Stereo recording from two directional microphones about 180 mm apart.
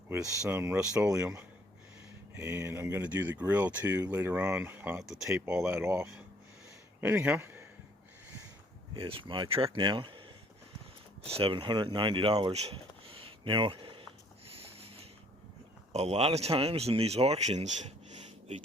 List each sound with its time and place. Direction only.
0.4 s speech: 10° right (ahead or behind)
2.3 s speech: 10° right (ahead or behind)
9.0 s speech: 30° right (ahead or behind)
11.3 s a sound: 30° right (ahead or behind)
15.9 s speech: 35° right (ahead or behind)
18.1 s a sound: 40° right (ahead or behind)